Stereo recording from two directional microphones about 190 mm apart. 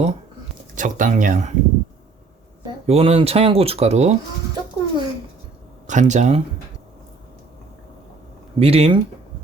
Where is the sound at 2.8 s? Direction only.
35° right (ahead or behind).